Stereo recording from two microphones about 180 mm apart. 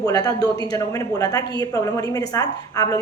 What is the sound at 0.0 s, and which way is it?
A woman's voice, 20° left (ahead or behind).